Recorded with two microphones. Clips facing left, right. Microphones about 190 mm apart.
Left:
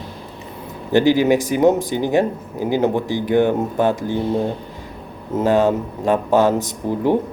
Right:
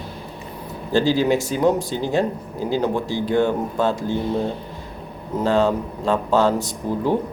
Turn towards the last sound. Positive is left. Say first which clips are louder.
# left 3 dB
turn(degrees=15)  # may be behind; listen again after turning